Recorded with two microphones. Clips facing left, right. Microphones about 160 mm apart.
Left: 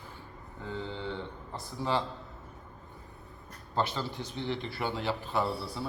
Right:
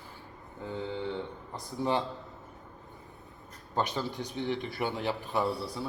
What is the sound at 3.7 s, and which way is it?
A man's voice, 15° right (ahead or behind).